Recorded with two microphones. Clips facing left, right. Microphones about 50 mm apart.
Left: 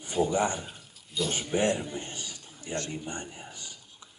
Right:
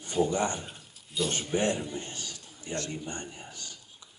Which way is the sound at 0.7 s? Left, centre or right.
Centre.